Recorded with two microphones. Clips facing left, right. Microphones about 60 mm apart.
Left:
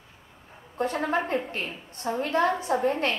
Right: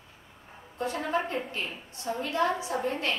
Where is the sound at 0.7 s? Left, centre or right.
Left.